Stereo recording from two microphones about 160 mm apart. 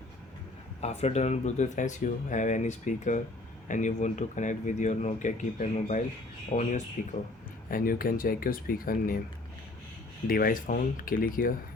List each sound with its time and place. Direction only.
0.8 s speech: 45° left (ahead or behind)
7.7 s speech: 60° left (ahead or behind)
10.2 s speech: 65° left (ahead or behind)